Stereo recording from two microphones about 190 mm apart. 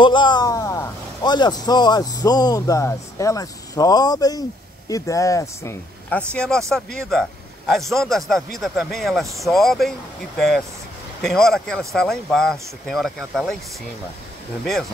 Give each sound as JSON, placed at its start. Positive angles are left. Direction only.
{"t": 0.0, "sound": "speech", "side_deg": 25}
{"t": 14.6, "sound": "speech", "side_deg": 0}